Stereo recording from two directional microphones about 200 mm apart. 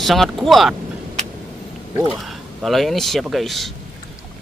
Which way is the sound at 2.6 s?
Centre (ahead or behind).